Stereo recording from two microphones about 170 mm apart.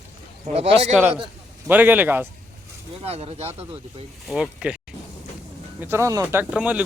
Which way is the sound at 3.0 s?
35° right (ahead or behind).